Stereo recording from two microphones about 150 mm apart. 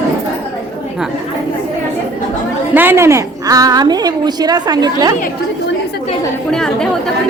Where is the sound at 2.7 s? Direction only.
15° right (ahead or behind).